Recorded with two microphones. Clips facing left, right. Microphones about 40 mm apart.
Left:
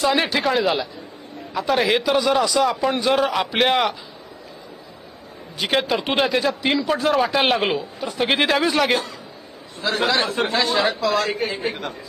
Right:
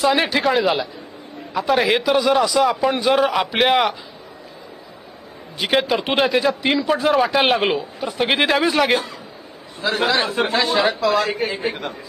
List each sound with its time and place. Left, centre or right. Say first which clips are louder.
0.0 s a man's voice: right 2 dB; centre
5.6 s a man's voice: right 2 dB; centre